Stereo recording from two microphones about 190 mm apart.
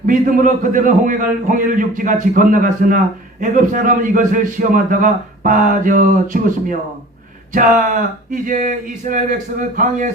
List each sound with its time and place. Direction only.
0.0 s a man's voice: 45° right (ahead or behind)